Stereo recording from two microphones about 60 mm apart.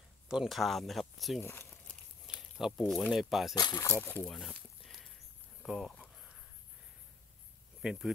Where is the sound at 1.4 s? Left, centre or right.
Left.